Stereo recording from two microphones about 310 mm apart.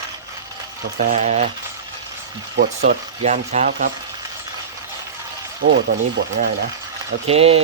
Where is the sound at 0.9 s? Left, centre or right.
Right.